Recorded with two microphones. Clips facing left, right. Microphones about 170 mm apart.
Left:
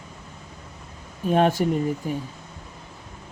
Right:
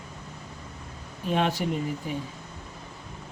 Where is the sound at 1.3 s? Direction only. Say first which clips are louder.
Left 6 dB; 45° left (ahead or behind).